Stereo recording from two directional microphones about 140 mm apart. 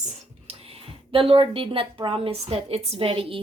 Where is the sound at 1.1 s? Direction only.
40° right (ahead or behind).